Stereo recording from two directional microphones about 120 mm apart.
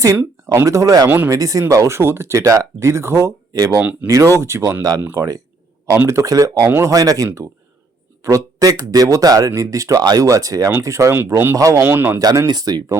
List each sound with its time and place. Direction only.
0.4 s speech: 25° right (ahead or behind)
1.0 s speech: 15° right (ahead or behind)
1.3 s speech: 30° right (ahead or behind)
3.8 s speech: 15° right (ahead or behind)
4.1 s speech: 25° right (ahead or behind)
4.9 s speech: 15° right (ahead or behind)
12.2 s speech: 30° right (ahead or behind)